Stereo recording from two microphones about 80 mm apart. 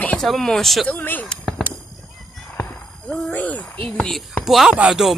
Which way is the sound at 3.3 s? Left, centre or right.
Centre.